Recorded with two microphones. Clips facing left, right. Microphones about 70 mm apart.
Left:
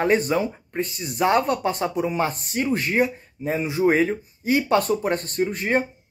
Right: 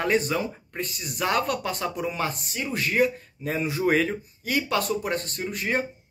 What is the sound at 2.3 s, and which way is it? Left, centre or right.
Speech, left.